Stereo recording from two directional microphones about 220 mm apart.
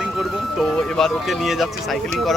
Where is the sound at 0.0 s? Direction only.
Centre (ahead or behind).